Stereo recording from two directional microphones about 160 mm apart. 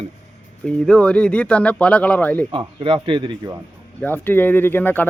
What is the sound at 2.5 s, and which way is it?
A man's voice, 35° right (ahead or behind).